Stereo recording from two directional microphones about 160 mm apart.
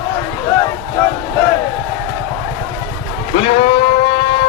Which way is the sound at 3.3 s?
35° left (ahead or behind).